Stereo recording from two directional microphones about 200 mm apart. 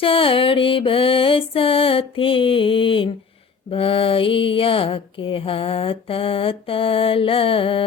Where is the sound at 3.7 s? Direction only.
25° left (ahead or behind).